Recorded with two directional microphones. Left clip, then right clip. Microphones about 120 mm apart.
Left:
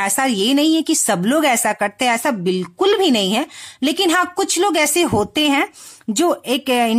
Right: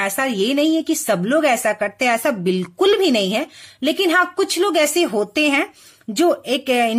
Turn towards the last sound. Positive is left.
turn(degrees=40)  # may be behind; listen again after turning